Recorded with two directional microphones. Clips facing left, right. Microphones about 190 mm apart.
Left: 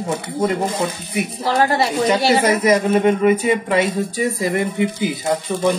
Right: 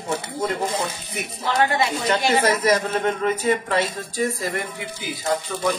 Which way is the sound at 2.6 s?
15° left (ahead or behind).